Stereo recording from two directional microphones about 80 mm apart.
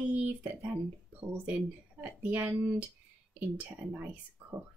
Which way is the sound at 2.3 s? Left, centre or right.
Right.